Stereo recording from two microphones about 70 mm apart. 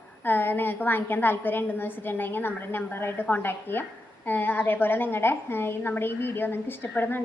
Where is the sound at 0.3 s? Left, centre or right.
Left.